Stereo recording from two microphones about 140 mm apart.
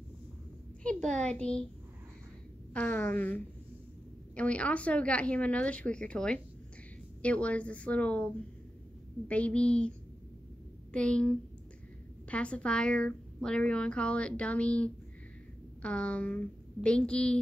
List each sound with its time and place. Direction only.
0.8 s a woman's voice: 10° left (ahead or behind)
2.7 s a woman's voice: 10° left (ahead or behind)
9.3 s a woman's voice: 10° left (ahead or behind)